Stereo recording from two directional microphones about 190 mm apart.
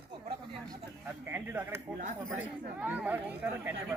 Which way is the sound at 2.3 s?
10° right (ahead or behind).